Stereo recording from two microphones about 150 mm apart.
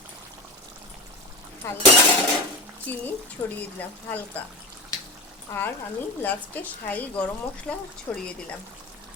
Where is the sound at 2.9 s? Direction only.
10° left (ahead or behind).